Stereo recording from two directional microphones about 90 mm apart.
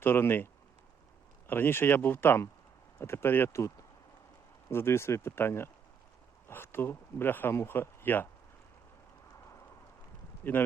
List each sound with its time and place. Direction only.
0.0 s speech: 25° left (ahead or behind)
4.7 s speech: 25° left (ahead or behind)
10.4 s speech: 25° left (ahead or behind)